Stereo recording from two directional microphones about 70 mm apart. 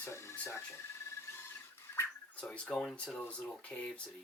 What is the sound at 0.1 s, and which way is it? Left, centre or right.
Speech, left.